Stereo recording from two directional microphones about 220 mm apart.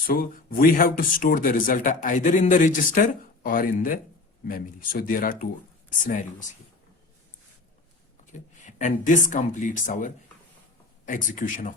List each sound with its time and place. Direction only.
0.1 s speech: 40° left (ahead or behind)
8.3 s speech: 35° left (ahead or behind)